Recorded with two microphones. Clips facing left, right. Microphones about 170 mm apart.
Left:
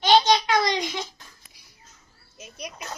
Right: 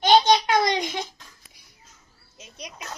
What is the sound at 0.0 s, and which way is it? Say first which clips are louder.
Child singing: right 1 dB; 50° right (ahead or behind).